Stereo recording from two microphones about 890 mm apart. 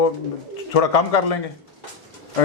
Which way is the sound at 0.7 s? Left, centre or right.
Left.